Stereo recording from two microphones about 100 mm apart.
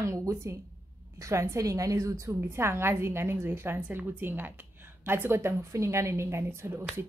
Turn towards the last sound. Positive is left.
turn(degrees=-25)  # may be behind; listen again after turning